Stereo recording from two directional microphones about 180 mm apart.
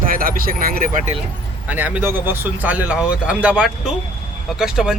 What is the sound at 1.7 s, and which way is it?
Speech, 10° right (ahead or behind).